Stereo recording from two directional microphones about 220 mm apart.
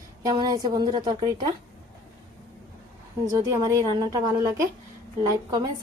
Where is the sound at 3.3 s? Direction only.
15° right (ahead or behind).